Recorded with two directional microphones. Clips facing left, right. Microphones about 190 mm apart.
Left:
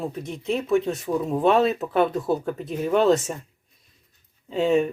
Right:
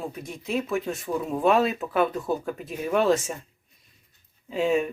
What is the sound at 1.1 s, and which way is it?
Speech, 15° left (ahead or behind).